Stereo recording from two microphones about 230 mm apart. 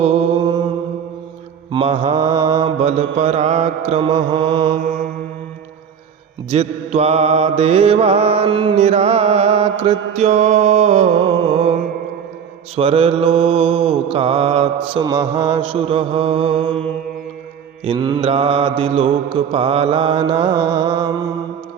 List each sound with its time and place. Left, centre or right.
0.0 s mantra: right
1.7 s mantra: right
6.5 s mantra: right
12.7 s mantra: right
17.8 s mantra: centre